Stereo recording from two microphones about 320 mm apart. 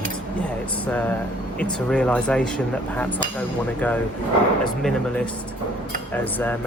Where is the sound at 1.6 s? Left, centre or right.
Centre.